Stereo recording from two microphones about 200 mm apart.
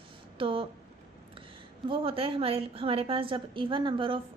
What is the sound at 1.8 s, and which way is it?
A woman's voice, 30° right (ahead or behind).